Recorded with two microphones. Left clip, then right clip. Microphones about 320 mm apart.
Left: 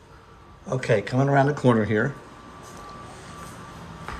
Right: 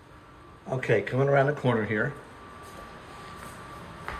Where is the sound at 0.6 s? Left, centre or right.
Centre.